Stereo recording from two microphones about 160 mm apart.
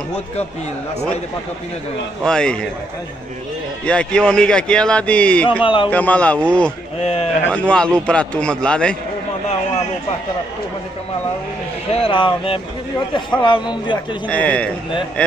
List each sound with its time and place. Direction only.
2.2 s a man's voice: 5° left (ahead or behind)
3.8 s speech: 5° left (ahead or behind)
5.5 s speech: 30° left (ahead or behind)
5.9 s speech: 10° left (ahead or behind)
7.0 s speech: 40° left (ahead or behind)
7.5 s speech: 5° left (ahead or behind)
11.9 s a man's voice: 35° left (ahead or behind)
14.2 s speech: 10° left (ahead or behind)